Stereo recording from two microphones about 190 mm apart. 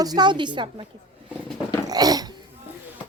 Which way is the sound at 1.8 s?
20° right (ahead or behind).